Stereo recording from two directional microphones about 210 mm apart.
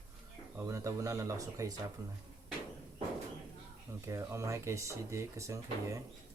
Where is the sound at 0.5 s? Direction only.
15° right (ahead or behind).